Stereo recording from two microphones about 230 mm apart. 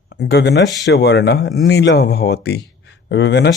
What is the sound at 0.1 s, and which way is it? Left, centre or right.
Speech, left.